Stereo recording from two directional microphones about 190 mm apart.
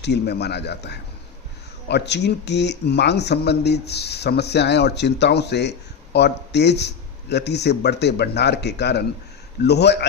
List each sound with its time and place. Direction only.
0.0 s speech: 60° left (ahead or behind)